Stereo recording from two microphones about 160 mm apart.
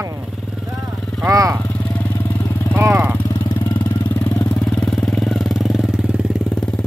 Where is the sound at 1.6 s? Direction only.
10° left (ahead or behind).